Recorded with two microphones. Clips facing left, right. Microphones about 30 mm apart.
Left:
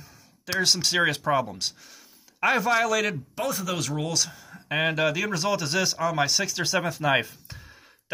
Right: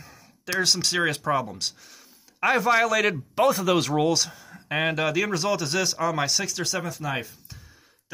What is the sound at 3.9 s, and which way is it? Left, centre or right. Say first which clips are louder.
Speech: right 6 dB; centre.